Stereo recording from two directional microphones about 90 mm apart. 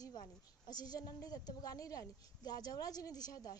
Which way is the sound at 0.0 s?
50° left (ahead or behind).